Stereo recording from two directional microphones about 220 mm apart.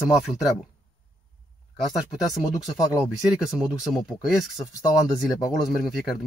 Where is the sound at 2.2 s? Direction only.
15° left (ahead or behind).